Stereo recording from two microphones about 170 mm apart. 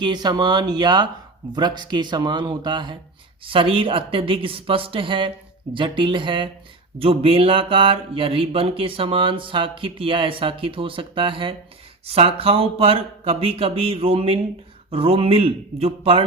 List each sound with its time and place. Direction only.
0.0 s speech: 25° right (ahead or behind)
3.4 s mantra: 30° right (ahead or behind)
5.7 s speech: 30° right (ahead or behind)
7.0 s mantra: 35° right (ahead or behind)